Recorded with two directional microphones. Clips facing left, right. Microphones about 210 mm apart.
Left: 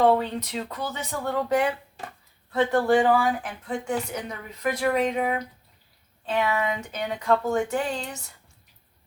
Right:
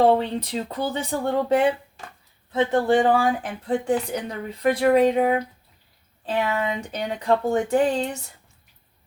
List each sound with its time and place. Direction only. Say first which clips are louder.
0.0 s speech: right 2 dB; 30° right (ahead or behind)